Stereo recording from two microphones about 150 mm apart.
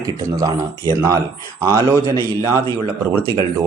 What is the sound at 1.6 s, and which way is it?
Speech, 20° right (ahead or behind).